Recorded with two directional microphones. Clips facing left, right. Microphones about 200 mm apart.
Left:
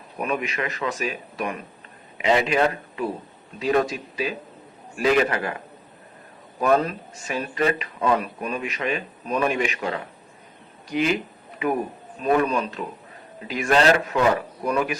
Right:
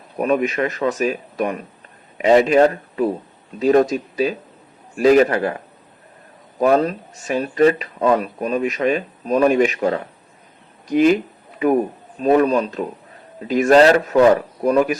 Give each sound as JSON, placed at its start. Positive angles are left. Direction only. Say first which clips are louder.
{"t": 0.2, "sound": "a man's voice", "louder": "right 8 dB", "side_deg": -40}
{"t": 12.2, "sound": "speech", "louder": "right 6 dB", "side_deg": -35}